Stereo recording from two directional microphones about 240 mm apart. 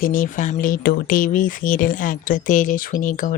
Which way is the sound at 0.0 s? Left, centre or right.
Left.